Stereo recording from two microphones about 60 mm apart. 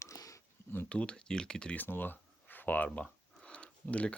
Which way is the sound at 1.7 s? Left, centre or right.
Left.